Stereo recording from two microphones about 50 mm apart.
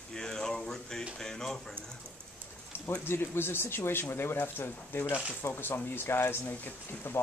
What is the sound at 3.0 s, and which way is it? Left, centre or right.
Speech, left.